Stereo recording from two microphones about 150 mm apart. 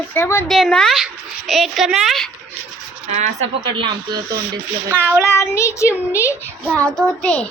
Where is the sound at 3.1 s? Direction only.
50° right (ahead or behind).